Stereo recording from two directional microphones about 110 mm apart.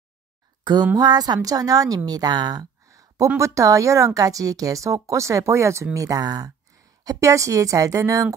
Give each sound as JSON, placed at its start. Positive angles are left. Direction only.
{"t": 0.9, "sound": "a woman's voice", "side_deg": -35}
{"t": 2.0, "sound": "a sound", "side_deg": -40}
{"t": 3.3, "sound": "a woman's voice", "side_deg": -30}